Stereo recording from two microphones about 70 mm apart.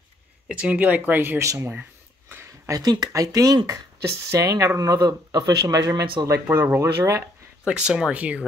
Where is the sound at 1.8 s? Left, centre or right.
Right.